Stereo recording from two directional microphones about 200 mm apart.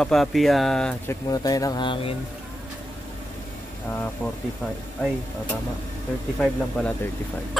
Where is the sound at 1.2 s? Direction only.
20° left (ahead or behind).